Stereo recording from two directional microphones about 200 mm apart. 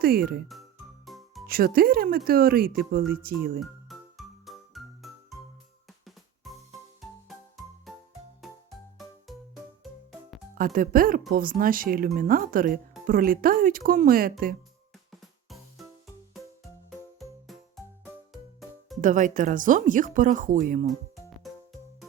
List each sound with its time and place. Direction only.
0.0 s speech: 50° right (ahead or behind)
1.0 s music: centre (ahead or behind)
1.5 s speech: 50° right (ahead or behind)
3.6 s music: centre (ahead or behind)
10.6 s speech: 45° right (ahead or behind)
15.1 s music: centre (ahead or behind)
17.4 s music: centre (ahead or behind)
19.0 s speech: 40° right (ahead or behind)
20.8 s music: centre (ahead or behind)